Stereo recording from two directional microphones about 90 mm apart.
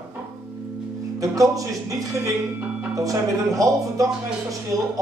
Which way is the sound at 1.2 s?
40° right (ahead or behind).